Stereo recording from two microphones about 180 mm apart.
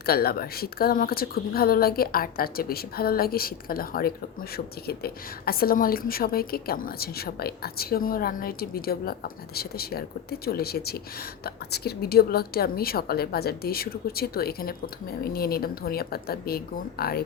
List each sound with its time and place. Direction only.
0.0 s a woman's voice: 60° left (ahead or behind)